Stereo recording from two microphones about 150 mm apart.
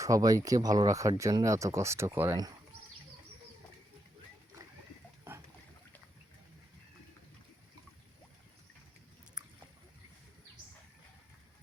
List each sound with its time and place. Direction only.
0.0 s speech: 20° right (ahead or behind)